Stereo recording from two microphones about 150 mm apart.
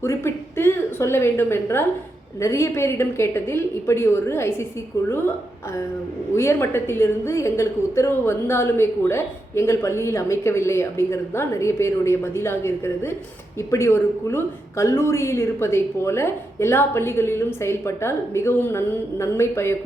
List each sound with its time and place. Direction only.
0.0 s a sound: 20° left (ahead or behind)
2.4 s a woman's voice: 20° left (ahead or behind)
6.3 s a woman's voice: 15° left (ahead or behind)